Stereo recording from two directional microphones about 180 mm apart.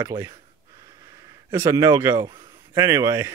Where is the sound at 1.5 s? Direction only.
15° right (ahead or behind).